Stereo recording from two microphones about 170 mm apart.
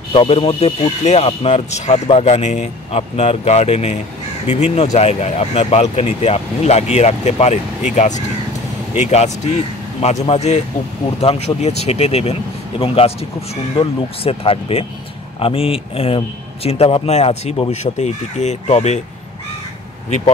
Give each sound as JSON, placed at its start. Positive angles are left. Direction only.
{"t": 0.1, "sound": "speech", "side_deg": 30}